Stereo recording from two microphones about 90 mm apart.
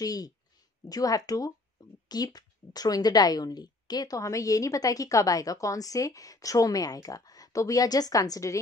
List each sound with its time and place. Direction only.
0.0 s speech: 45° left (ahead or behind)